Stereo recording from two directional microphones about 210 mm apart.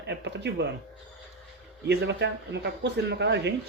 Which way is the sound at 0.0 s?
55° right (ahead or behind).